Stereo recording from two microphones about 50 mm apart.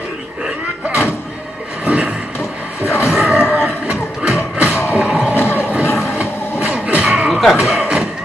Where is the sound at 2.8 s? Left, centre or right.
Left.